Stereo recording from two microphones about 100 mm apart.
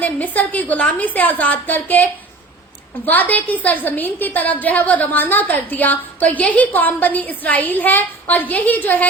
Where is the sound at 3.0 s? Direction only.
15° left (ahead or behind).